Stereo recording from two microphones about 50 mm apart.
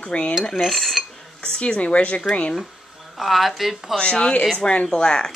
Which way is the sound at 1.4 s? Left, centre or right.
Left.